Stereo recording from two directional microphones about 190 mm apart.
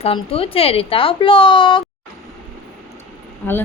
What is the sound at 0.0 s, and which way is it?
Speech, 30° left (ahead or behind).